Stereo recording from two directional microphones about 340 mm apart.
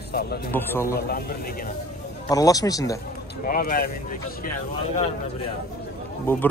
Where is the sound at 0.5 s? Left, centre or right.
Centre.